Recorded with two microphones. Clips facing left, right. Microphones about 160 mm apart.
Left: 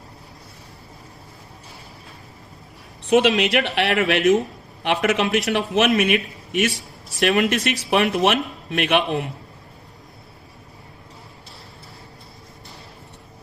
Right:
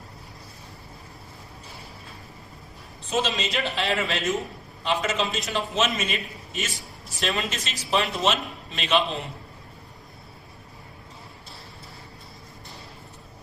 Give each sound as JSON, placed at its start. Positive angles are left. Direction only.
{"t": 3.0, "sound": "a woman's voice", "side_deg": 65}